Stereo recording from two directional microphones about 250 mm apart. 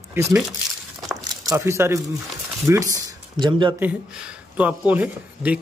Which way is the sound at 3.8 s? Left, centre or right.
Centre.